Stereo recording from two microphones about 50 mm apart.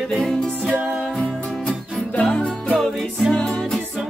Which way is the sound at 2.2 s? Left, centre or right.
Centre.